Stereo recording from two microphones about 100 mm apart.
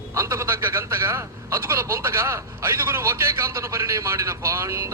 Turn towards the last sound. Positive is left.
turn(degrees=-25)  # may be behind; listen again after turning